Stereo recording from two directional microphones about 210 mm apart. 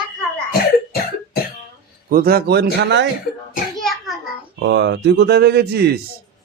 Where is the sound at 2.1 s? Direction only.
45° right (ahead or behind).